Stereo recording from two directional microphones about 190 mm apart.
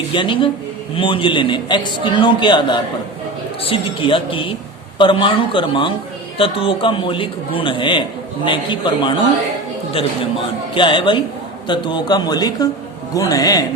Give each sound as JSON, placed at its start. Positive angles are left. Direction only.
{"t": 0.1, "sound": "a man's voice", "side_deg": 25}
{"t": 10.8, "sound": "a man's voice", "side_deg": 25}